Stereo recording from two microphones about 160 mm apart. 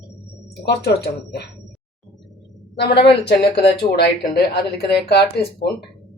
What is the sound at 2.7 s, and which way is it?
A woman's voice, 90° left.